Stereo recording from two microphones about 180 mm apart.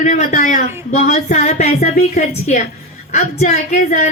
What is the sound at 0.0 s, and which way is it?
A woman's voice, 40° left (ahead or behind).